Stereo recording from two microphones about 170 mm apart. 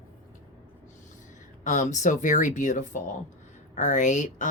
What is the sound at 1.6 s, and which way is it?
Speech, 50° left (ahead or behind).